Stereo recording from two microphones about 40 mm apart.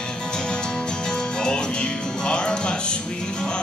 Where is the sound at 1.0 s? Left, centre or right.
Centre.